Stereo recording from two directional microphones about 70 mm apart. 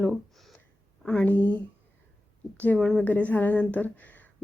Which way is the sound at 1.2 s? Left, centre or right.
Left.